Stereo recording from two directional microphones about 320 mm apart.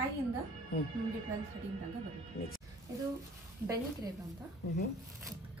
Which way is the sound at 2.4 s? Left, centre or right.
Left.